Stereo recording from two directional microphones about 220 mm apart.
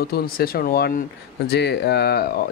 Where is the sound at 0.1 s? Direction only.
45° left (ahead or behind).